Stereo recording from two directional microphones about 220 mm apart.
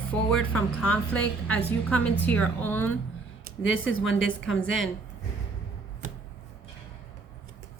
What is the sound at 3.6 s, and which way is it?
Speech, 60° left (ahead or behind).